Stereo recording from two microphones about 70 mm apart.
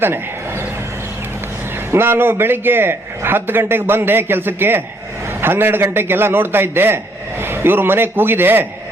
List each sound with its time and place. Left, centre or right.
1.9 s a man's voice: right